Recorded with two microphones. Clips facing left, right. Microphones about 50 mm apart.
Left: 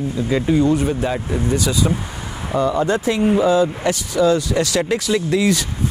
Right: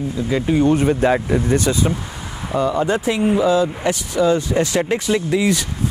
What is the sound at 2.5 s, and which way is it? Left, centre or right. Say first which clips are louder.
Speech: even; centre.